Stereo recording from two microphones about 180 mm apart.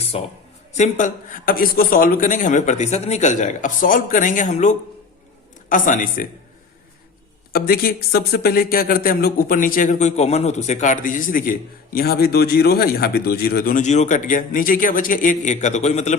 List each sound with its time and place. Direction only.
0.0 s a sound: 35° left (ahead or behind)
0.8 s a man's voice: 45° left (ahead or behind)
7.5 s a man's voice: 55° left (ahead or behind); by 16.1 s 40° left (ahead or behind)